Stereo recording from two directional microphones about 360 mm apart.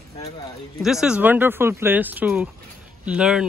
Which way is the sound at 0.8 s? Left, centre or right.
Centre.